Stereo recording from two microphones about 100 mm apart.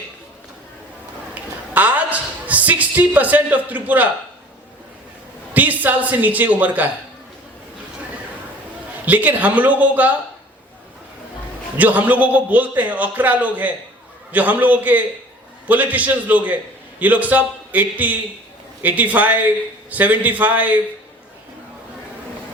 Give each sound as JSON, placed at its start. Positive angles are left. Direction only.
{"t": 1.3, "sound": "a sound", "side_deg": -15}
{"t": 5.5, "sound": "a man's voice", "side_deg": -15}
{"t": 9.0, "sound": "a man's voice", "side_deg": -15}
{"t": 11.8, "sound": "a man's voice", "side_deg": -15}